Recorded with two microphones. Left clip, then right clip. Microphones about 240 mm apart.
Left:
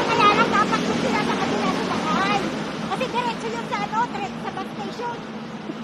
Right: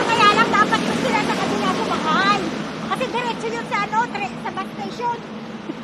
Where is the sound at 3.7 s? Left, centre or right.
Right.